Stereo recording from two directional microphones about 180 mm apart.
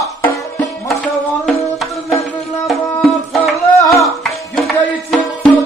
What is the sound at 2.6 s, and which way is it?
Music, centre (ahead or behind).